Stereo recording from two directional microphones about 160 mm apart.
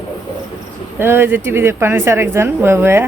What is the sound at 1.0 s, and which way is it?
Speech, 15° right (ahead or behind).